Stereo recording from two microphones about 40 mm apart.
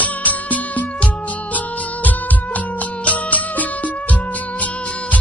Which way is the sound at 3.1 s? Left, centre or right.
Left.